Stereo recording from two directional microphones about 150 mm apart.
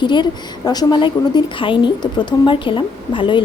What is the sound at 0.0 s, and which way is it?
A woman's voice, 30° left (ahead or behind).